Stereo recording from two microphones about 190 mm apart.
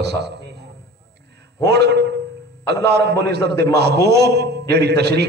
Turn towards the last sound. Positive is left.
turn(degrees=-60)  # may be behind; listen again after turning